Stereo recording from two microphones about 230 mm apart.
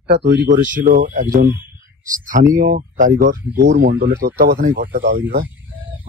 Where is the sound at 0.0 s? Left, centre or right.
Right.